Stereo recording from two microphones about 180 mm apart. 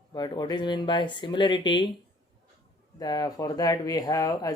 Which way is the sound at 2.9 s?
20° left (ahead or behind).